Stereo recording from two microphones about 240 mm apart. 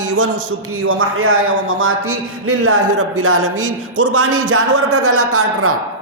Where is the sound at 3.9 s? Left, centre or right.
Right.